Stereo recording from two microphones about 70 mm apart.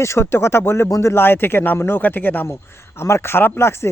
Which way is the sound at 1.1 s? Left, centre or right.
Left.